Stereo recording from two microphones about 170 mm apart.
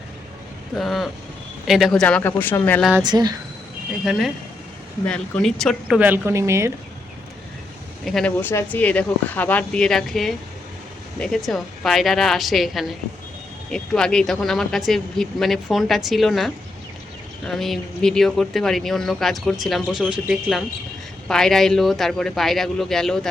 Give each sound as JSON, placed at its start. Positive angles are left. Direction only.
{"t": 0.8, "sound": "speech", "side_deg": 0}
{"t": 3.0, "sound": "speech", "side_deg": -25}
{"t": 4.0, "sound": "speech", "side_deg": -5}
{"t": 6.0, "sound": "speech", "side_deg": -10}
{"t": 8.0, "sound": "speech", "side_deg": 5}